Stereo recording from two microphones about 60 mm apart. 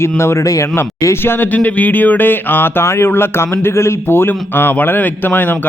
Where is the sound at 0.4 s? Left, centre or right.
Left.